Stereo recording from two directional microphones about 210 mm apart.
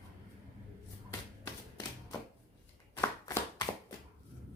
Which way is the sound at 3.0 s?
15° left (ahead or behind).